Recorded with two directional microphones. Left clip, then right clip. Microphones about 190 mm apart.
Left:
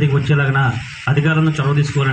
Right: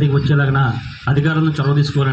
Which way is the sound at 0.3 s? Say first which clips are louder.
Left 3 dB; 55° right (ahead or behind).